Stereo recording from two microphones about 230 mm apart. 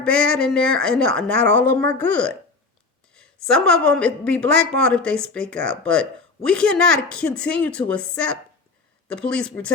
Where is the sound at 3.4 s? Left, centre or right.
Centre.